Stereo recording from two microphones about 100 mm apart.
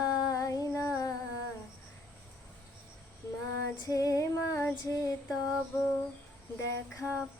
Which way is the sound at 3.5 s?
35° left (ahead or behind).